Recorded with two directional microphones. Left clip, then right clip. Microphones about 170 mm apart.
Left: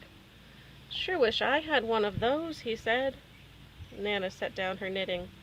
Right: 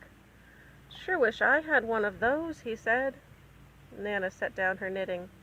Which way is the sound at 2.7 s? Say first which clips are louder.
Right 1 dB; 35° left (ahead or behind).